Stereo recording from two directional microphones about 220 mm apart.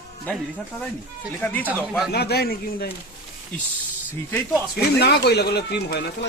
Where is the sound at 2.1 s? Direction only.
45° left (ahead or behind).